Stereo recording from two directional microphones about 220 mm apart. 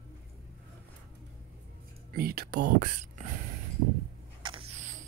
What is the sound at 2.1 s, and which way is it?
Speech, 45° right (ahead or behind).